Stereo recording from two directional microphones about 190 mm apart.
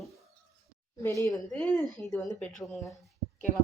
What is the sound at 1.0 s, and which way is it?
A woman's voice, 15° left (ahead or behind).